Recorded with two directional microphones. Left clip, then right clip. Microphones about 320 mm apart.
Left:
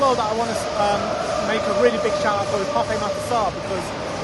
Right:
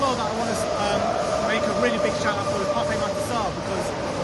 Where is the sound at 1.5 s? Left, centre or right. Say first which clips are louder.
Left 4 dB; centre.